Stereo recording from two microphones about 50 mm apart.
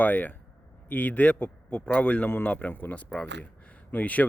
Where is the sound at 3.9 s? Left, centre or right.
Left.